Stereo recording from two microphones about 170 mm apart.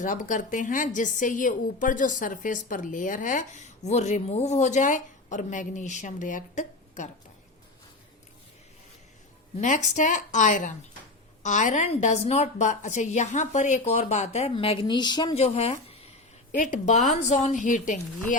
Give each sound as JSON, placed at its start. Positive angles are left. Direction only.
{"t": 0.0, "sound": "a woman's voice", "side_deg": 50}
{"t": 9.6, "sound": "a woman's voice", "side_deg": 45}
{"t": 15.4, "sound": "a woman's voice", "side_deg": 35}